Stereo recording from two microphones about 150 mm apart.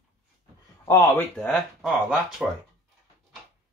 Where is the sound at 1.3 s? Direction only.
5° left (ahead or behind).